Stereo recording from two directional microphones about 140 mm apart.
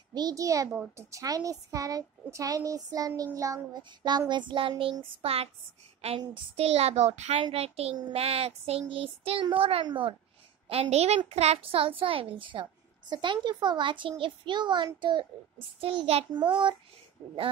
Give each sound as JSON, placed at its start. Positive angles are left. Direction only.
{"t": 0.1, "sound": "speech", "side_deg": -25}
{"t": 0.7, "sound": "a child's voice", "side_deg": -10}
{"t": 1.1, "sound": "a child's voice", "side_deg": -25}
{"t": 5.9, "sound": "a sound", "side_deg": -45}
{"t": 6.5, "sound": "a child's voice", "side_deg": -45}
{"t": 15.8, "sound": "a child's voice", "side_deg": -45}